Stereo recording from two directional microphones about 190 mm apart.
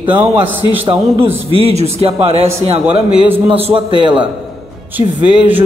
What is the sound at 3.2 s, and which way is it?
Speech, 10° right (ahead or behind).